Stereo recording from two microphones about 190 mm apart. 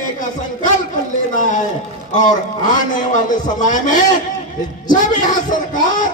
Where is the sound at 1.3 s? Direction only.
40° left (ahead or behind).